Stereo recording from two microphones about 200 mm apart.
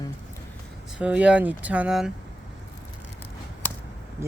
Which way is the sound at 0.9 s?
5° right (ahead or behind).